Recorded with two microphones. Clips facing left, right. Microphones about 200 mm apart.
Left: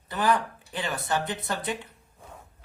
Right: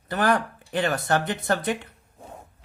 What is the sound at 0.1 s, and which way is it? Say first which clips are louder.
Speech: right 2 dB; 65° right (ahead or behind).